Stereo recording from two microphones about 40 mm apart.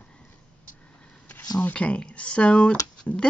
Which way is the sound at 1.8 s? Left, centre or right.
Left.